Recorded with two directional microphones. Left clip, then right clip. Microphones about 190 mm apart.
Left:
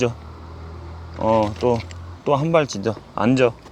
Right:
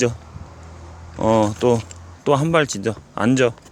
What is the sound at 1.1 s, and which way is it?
Speech, 55° right (ahead or behind).